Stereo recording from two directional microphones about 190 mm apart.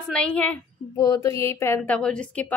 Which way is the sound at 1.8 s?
5° left (ahead or behind).